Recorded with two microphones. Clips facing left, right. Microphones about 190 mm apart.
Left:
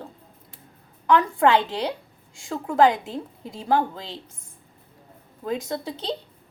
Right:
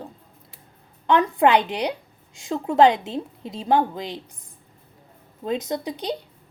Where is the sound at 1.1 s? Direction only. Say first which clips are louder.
Right 1 dB; 20° right (ahead or behind).